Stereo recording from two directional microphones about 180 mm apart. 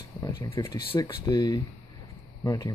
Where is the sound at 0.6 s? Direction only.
20° left (ahead or behind).